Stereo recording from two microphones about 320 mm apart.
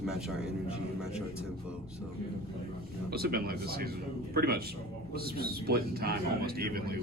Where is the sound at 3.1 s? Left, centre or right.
Right.